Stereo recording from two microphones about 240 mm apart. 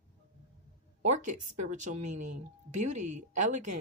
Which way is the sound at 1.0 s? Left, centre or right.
Right.